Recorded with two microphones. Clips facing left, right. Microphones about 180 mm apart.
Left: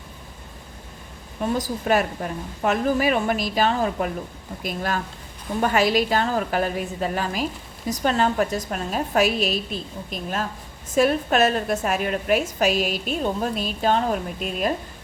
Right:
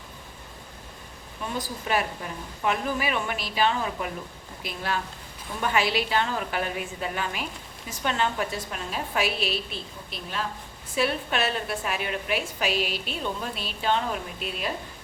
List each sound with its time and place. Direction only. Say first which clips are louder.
1.5 s a woman's voice: left 5 dB; 45° left (ahead or behind)